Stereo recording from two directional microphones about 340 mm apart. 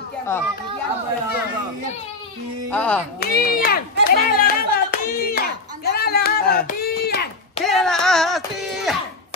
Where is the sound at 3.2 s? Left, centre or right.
Left.